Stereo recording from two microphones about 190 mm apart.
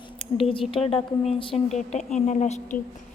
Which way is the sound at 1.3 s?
30° left (ahead or behind).